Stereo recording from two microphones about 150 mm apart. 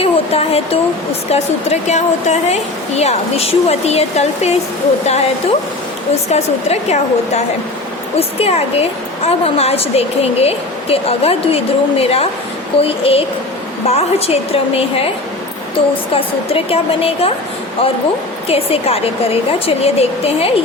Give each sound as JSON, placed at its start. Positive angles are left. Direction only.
{"t": 0.0, "sound": "a woman's voice", "side_deg": 40}
{"t": 18.4, "sound": "a woman's voice", "side_deg": 40}